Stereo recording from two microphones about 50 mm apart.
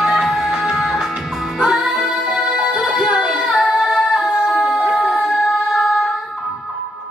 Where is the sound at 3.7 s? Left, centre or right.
Centre.